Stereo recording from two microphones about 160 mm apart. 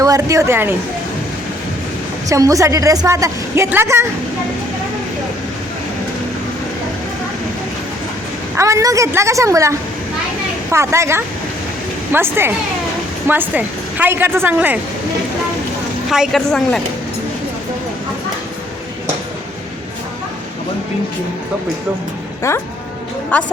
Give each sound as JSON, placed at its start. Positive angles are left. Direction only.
{"t": 0.0, "sound": "a woman's voice", "side_deg": -20}
{"t": 2.3, "sound": "a woman's voice", "side_deg": -20}
{"t": 8.5, "sound": "a woman's voice", "side_deg": -20}
{"t": 16.0, "sound": "speech", "side_deg": 0}
{"t": 22.5, "sound": "speech", "side_deg": 15}